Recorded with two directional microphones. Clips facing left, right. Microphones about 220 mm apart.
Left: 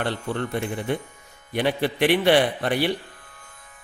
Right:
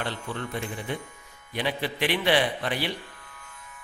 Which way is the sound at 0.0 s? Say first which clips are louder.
Left 6 dB; 60° left (ahead or behind).